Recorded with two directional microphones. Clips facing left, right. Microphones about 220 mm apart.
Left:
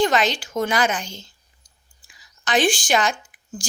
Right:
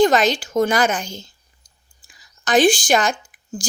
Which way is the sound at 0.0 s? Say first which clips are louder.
Right 5 dB; 40° right (ahead or behind).